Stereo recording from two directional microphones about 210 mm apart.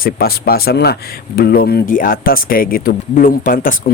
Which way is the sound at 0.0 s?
45° left (ahead or behind).